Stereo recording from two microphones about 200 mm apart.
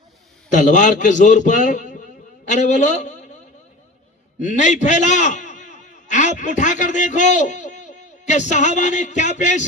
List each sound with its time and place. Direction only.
0.5 s a man's voice: 40° left (ahead or behind)
4.4 s a man's voice: 40° left (ahead or behind)